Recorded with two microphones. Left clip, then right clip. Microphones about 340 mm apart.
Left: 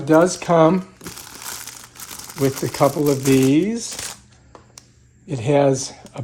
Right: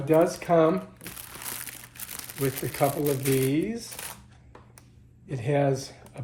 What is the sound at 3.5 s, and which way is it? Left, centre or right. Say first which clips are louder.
Speech: left 10 dB; left.